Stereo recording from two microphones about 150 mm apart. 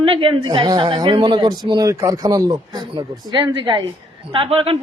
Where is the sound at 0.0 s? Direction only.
35° right (ahead or behind).